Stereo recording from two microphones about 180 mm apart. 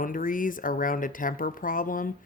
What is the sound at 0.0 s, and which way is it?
Speech, 50° left (ahead or behind).